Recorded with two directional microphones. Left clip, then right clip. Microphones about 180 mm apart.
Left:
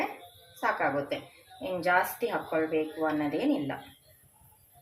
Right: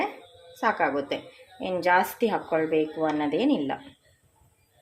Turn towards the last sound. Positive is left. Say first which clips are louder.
# right 4 dB
turn(degrees=-65)  # may be behind; listen again after turning